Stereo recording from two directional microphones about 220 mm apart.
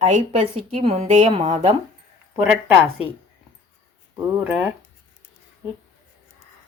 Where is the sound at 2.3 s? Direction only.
10° right (ahead or behind).